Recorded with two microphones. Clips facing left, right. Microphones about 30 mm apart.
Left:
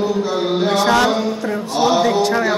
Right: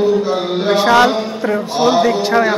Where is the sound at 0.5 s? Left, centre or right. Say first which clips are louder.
Right 4 dB; right.